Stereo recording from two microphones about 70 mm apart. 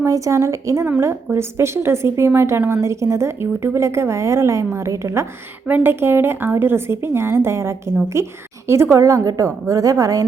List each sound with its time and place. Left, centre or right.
0.0 s a woman's voice: right
5.6 s a woman's voice: right